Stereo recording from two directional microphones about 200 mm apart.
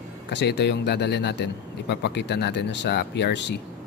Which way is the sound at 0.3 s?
60° left (ahead or behind).